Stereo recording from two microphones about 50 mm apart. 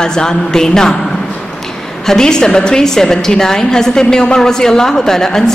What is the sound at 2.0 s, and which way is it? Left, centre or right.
A woman's voice, centre.